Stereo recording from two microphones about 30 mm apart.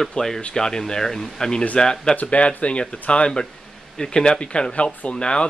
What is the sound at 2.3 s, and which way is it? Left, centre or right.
Speech, left.